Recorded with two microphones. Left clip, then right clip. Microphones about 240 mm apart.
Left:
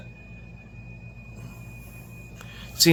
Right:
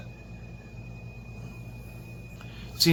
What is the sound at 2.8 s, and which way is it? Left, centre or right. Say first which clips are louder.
Speech: left 5 dB; left.